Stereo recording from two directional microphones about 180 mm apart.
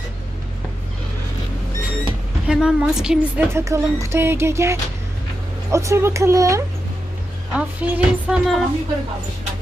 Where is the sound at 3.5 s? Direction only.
15° right (ahead or behind).